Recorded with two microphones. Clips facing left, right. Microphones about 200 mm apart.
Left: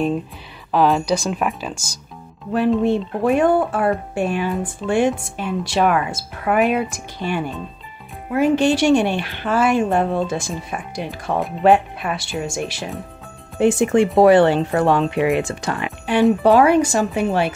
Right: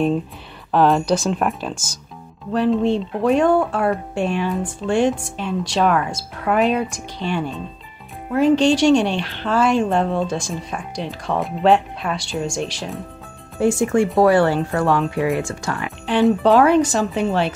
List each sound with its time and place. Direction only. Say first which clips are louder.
0.7 s speech: right 1 dB; centre (ahead or behind)
13.6 s speech: left 2 dB; 20° left (ahead or behind)